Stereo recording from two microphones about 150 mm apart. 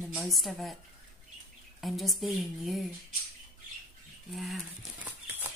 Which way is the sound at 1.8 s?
Centre (ahead or behind).